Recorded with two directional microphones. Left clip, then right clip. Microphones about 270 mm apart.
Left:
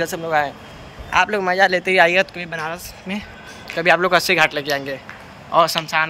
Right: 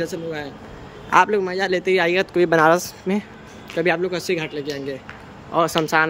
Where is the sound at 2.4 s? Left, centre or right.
Right.